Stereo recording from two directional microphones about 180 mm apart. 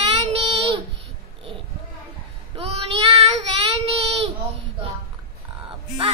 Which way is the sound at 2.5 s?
35° right (ahead or behind).